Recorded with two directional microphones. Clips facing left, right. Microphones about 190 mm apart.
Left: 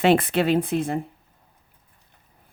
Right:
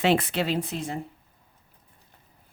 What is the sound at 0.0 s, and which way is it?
Speech, 55° left (ahead or behind).